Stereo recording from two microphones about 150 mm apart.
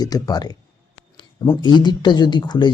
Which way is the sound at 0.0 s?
25° left (ahead or behind).